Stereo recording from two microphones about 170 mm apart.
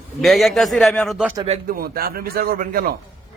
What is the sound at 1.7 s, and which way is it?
A man's voice, 60° right (ahead or behind).